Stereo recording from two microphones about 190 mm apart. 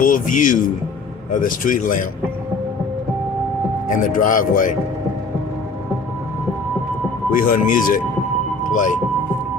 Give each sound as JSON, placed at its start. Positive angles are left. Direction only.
{"t": 0.0, "sound": "a man's voice", "side_deg": 45}
{"t": 3.8, "sound": "speech", "side_deg": 45}
{"t": 7.3, "sound": "speech", "side_deg": 45}